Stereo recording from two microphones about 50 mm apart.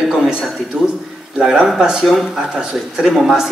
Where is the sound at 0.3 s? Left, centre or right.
Centre.